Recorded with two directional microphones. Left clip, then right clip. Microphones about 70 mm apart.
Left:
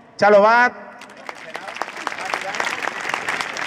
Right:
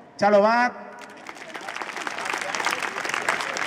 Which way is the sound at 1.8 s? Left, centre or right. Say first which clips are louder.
Left 8 dB; left.